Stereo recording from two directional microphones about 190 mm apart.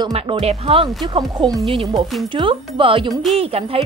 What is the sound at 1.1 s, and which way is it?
A woman's voice, 20° right (ahead or behind).